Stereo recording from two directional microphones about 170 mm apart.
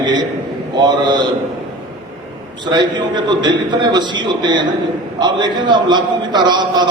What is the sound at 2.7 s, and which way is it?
A man's voice, 25° right (ahead or behind).